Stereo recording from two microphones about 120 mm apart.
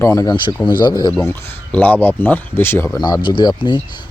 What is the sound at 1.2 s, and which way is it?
Speech, 15° left (ahead or behind).